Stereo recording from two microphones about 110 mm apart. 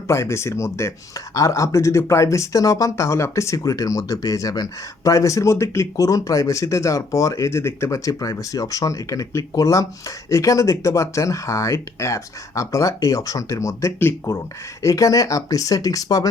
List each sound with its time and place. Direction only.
0.1 s speech: 25° left (ahead or behind)